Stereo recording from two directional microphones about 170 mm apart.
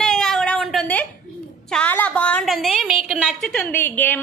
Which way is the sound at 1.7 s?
10° left (ahead or behind).